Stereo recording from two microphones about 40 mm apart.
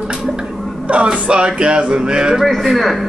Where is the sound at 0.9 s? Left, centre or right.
Right.